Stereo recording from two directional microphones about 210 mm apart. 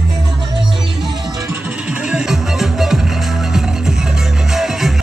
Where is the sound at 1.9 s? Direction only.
5° right (ahead or behind).